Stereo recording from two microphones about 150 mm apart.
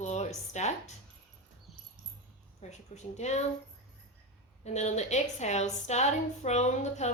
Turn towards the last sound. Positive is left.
turn(degrees=50)  # may be behind; listen again after turning